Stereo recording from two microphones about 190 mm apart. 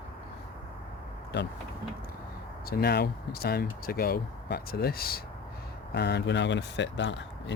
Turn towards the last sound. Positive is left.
turn(degrees=70)  # may be behind; listen again after turning